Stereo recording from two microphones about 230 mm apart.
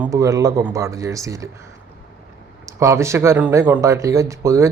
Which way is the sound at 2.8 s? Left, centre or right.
Centre.